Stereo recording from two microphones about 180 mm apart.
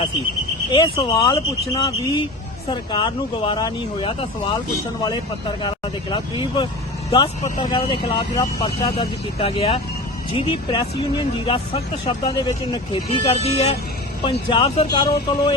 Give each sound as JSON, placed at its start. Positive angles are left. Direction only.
{"t": 0.7, "sound": "speech", "side_deg": 25}